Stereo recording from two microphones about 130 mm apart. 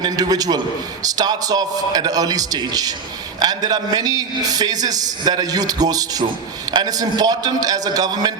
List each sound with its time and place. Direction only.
0.0 s a man's voice: 30° right (ahead or behind)